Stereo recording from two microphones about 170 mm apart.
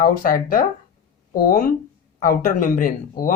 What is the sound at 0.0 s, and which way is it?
Speech, 55° left (ahead or behind).